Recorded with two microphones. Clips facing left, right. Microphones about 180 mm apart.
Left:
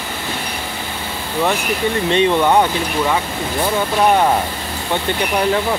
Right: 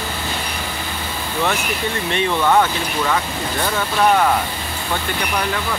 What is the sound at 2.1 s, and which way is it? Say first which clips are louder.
Speech: left 4 dB; 20° left (ahead or behind).